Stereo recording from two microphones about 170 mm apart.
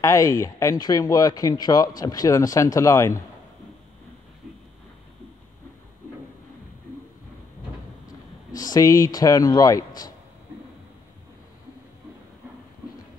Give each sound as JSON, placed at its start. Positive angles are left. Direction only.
{"t": 0.0, "sound": "speech", "side_deg": 20}
{"t": 8.1, "sound": "speech", "side_deg": 20}